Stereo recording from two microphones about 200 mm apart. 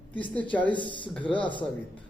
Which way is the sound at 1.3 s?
5° left (ahead or behind).